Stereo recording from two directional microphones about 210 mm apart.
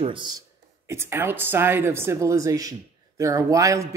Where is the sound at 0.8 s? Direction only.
10° right (ahead or behind).